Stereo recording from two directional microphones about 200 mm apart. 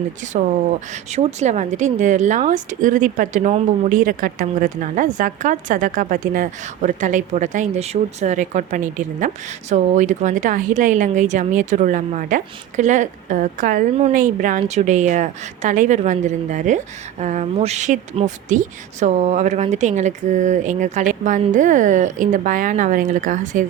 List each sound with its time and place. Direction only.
1.1 s a woman's voice: 35° right (ahead or behind)